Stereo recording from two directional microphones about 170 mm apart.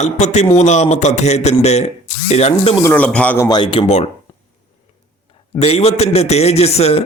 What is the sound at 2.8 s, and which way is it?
Speech, 10° left (ahead or behind).